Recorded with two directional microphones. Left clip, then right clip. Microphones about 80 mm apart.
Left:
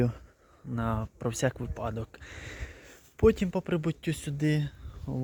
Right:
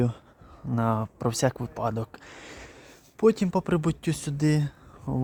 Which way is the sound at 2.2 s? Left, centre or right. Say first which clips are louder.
Even; centre.